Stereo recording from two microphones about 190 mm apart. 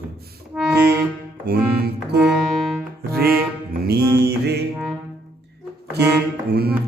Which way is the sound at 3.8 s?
55° right (ahead or behind).